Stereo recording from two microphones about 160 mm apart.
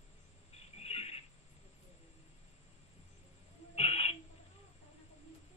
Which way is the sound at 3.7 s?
40° left (ahead or behind).